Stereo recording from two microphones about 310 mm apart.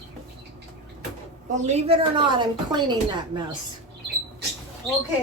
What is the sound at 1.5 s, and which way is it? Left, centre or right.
A woman's voice, right.